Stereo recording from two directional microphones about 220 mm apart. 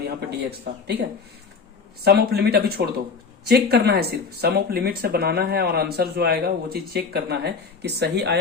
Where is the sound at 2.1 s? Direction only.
45° right (ahead or behind).